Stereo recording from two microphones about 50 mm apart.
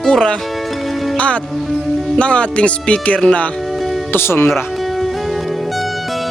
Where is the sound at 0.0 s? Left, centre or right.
Left.